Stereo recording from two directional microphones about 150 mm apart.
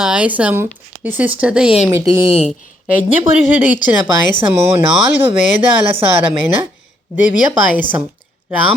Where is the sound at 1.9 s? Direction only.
20° right (ahead or behind).